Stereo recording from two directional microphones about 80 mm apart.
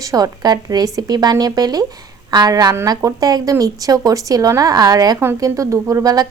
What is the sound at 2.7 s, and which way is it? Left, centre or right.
Speech, right.